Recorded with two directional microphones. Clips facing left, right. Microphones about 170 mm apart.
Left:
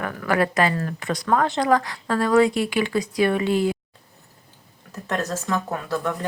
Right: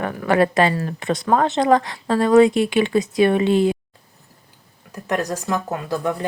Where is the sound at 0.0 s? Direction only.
25° right (ahead or behind).